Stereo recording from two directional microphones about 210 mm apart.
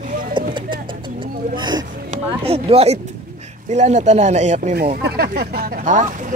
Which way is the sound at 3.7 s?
35° right (ahead or behind).